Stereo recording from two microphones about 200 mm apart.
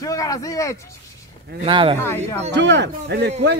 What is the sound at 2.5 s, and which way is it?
Speech, 60° right (ahead or behind).